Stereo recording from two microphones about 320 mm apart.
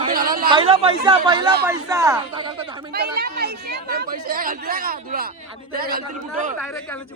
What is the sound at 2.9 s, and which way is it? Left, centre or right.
Speech, right.